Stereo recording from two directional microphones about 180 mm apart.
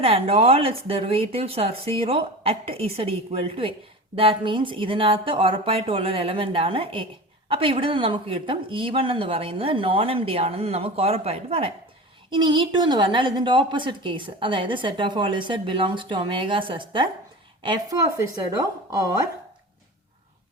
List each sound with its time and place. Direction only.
0.0 s a woman's voice: 30° right (ahead or behind)
18.2 s a woman's voice: 20° right (ahead or behind)